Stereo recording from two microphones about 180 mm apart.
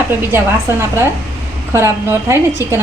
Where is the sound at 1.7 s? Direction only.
15° right (ahead or behind).